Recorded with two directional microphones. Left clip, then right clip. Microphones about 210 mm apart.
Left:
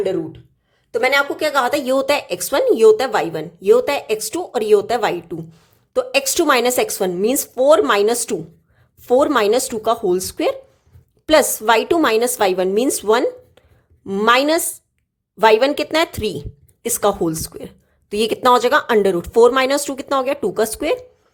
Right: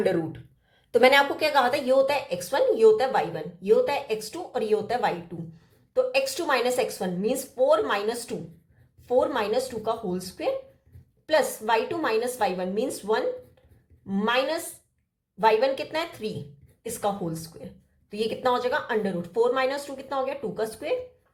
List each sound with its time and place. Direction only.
0.0 s a woman's voice: 5° left (ahead or behind)
1.5 s a woman's voice: 35° left (ahead or behind)